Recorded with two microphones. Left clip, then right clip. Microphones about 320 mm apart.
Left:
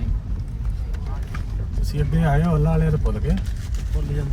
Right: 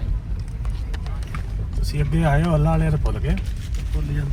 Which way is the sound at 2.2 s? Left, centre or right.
Right.